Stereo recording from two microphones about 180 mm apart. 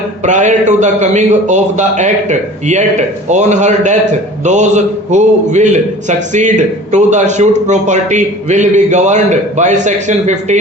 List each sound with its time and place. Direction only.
0.2 s a man's voice: 40° right (ahead or behind)
3.2 s a man's voice: 40° right (ahead or behind)